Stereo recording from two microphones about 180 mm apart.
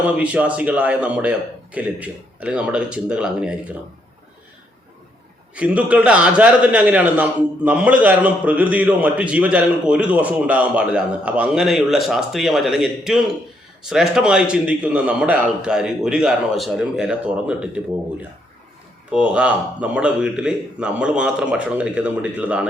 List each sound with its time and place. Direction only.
0.0 s a man's voice: 5° right (ahead or behind)
5.5 s a man's voice: 5° right (ahead or behind)
19.1 s a man's voice: 5° right (ahead or behind)